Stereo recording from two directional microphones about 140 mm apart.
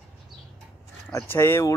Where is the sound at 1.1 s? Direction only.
15° left (ahead or behind).